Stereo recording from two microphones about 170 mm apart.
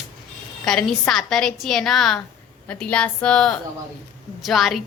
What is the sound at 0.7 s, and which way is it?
A woman's voice, 5° left (ahead or behind).